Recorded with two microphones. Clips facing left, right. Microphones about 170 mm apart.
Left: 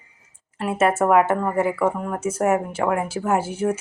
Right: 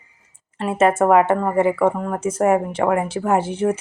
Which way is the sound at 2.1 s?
10° left (ahead or behind).